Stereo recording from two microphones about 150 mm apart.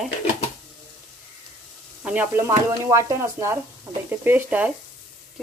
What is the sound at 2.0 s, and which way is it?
Speech, 15° right (ahead or behind).